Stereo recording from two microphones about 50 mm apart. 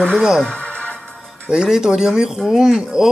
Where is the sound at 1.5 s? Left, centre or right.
Centre.